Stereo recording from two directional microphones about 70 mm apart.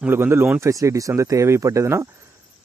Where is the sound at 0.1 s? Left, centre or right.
Right.